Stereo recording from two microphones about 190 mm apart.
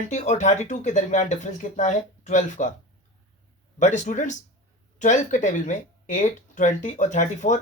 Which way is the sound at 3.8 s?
40° left (ahead or behind).